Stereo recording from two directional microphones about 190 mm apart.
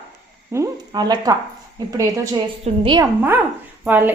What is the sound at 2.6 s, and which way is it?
Speech, 25° right (ahead or behind).